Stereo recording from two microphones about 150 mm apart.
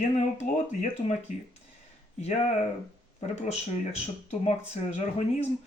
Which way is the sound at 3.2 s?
45° left (ahead or behind).